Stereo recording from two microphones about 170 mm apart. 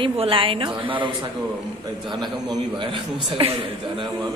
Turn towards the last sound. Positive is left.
turn(degrees=-30)  # may be behind; listen again after turning